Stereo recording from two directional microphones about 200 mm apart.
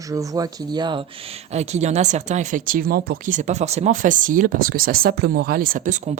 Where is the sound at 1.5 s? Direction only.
35° right (ahead or behind).